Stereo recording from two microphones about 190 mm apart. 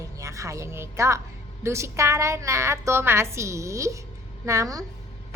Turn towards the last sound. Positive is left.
turn(degrees=-20)  # may be behind; listen again after turning